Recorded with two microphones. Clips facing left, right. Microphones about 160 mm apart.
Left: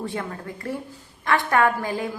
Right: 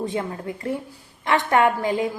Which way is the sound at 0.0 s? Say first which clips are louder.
Right 4 dB; 20° right (ahead or behind).